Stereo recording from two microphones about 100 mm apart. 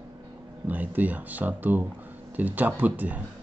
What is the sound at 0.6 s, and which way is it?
A man's voice, 15° right (ahead or behind).